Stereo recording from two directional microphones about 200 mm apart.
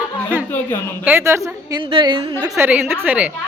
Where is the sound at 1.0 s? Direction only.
10° right (ahead or behind).